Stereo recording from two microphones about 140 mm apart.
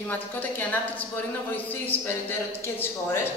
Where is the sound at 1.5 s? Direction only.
15° left (ahead or behind).